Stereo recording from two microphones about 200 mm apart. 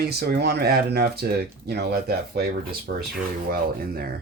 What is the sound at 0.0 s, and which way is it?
Speech, 50° right (ahead or behind).